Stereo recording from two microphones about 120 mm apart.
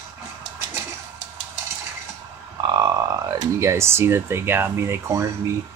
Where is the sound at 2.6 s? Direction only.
35° right (ahead or behind).